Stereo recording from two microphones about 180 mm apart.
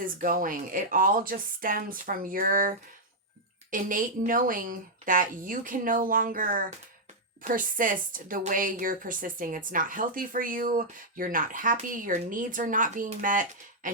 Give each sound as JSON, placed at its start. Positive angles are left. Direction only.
{"t": 0.0, "sound": "speech", "side_deg": -50}